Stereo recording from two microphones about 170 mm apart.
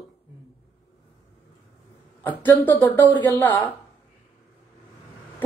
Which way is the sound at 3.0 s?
25° right (ahead or behind).